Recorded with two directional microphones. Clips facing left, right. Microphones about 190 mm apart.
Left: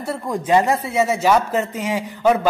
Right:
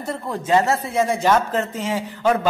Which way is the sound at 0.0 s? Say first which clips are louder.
Left 2 dB; 10° left (ahead or behind).